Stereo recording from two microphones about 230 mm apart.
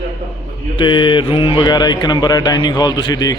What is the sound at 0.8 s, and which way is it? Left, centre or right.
A man's voice, left.